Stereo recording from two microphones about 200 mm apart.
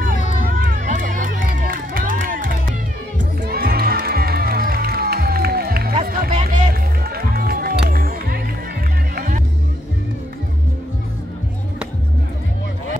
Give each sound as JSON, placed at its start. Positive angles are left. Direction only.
{"t": 0.6, "sound": "music", "side_deg": -45}
{"t": 5.9, "sound": "music", "side_deg": -40}